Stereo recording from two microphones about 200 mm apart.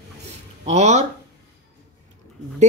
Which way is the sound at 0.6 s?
35° right (ahead or behind).